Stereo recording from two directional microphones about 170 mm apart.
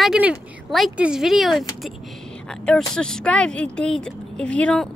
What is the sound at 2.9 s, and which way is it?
A woman's voice, 5° left (ahead or behind).